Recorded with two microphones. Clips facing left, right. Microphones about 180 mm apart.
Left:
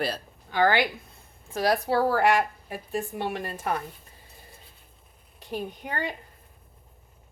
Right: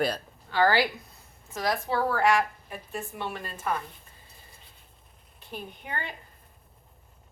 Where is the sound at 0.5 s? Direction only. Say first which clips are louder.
Left 1 dB; 20° left (ahead or behind).